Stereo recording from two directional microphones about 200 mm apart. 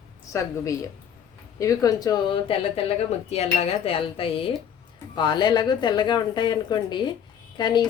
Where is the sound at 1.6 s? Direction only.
15° left (ahead or behind).